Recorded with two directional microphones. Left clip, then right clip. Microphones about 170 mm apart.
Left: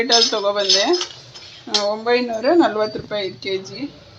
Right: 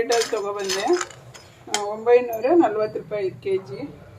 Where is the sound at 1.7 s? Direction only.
30° left (ahead or behind).